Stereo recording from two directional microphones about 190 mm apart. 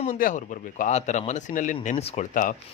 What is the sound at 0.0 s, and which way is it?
Speech, 45° left (ahead or behind).